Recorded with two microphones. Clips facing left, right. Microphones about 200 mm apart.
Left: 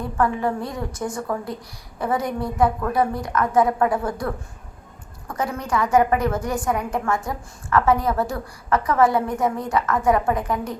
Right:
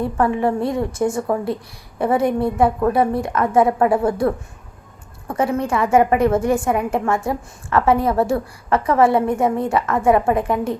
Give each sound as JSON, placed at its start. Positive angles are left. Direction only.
{"t": 0.3, "sound": "a woman's voice", "side_deg": -25}
{"t": 5.3, "sound": "a woman's voice", "side_deg": -25}